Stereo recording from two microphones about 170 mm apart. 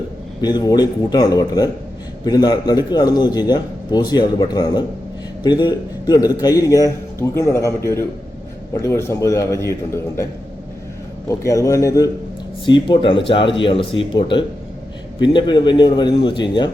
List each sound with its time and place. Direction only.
0.4 s a man's voice: 25° left (ahead or behind)
11.3 s a man's voice: 20° left (ahead or behind)